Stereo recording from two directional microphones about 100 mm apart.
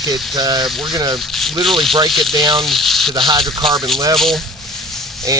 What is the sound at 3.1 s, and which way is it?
Speech, 55° right (ahead or behind).